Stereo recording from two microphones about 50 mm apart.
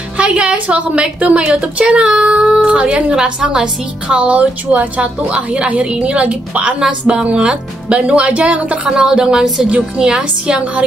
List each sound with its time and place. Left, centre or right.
0.2 s a woman's voice: right
4.1 s a woman's voice: right
8.8 s speech: centre